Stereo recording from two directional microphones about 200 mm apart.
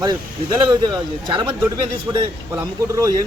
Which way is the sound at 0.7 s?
20° right (ahead or behind).